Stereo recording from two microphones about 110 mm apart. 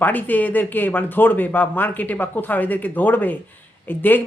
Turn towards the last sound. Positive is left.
turn(degrees=15)  # may be behind; listen again after turning